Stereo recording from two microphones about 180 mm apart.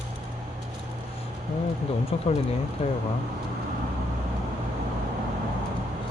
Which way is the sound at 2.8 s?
35° left (ahead or behind).